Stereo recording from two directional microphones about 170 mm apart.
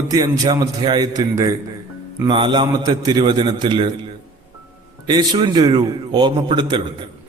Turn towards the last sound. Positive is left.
turn(degrees=-30)  # may be behind; listen again after turning